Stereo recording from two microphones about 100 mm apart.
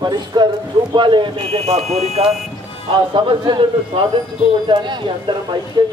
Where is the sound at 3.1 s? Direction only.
50° right (ahead or behind).